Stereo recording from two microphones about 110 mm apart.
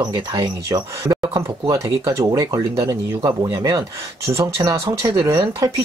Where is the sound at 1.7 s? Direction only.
30° right (ahead or behind).